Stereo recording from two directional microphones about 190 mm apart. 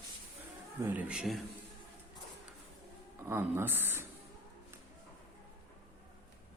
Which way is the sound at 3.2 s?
10° right (ahead or behind).